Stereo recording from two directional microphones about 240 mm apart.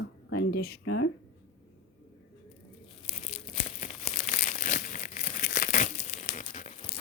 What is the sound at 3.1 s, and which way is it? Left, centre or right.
Crumpling, left.